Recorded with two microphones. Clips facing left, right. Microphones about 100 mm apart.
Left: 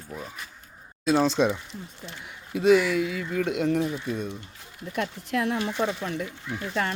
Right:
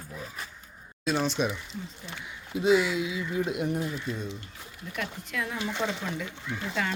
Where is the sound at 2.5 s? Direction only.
70° left (ahead or behind).